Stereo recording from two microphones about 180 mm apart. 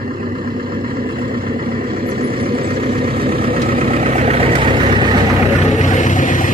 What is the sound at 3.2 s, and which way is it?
Vehicle, 55° right (ahead or behind).